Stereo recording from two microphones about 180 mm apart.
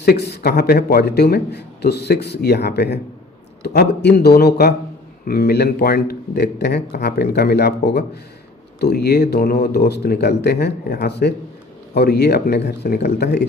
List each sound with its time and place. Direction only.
0.0 s a man's voice: 65° left (ahead or behind)